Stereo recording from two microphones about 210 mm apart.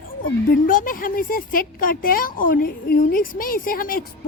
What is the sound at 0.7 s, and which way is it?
A woman's voice, 40° left (ahead or behind).